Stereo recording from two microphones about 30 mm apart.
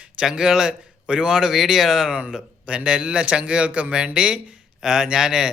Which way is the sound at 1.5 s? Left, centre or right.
Centre.